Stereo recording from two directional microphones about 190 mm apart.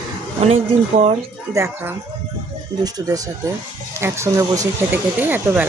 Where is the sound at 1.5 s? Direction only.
15° right (ahead or behind).